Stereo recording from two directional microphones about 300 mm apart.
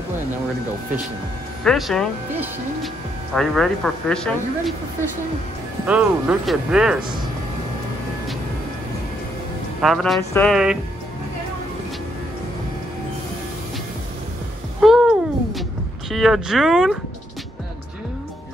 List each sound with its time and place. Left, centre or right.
1.6 s speech: centre
5.9 s speech: centre
9.8 s speech: centre
14.8 s a sound: centre
16.1 s speech: centre